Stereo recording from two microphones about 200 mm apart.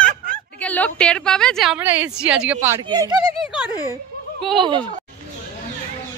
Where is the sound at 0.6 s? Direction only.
10° left (ahead or behind).